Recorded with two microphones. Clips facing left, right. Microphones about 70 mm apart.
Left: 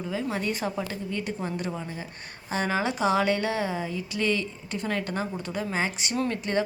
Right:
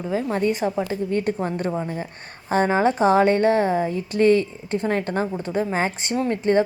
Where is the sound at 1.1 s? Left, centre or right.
Right.